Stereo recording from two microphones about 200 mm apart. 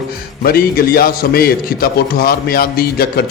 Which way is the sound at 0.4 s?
50° left (ahead or behind).